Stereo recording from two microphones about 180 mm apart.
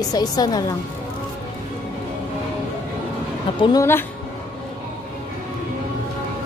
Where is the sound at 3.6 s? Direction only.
20° left (ahead or behind).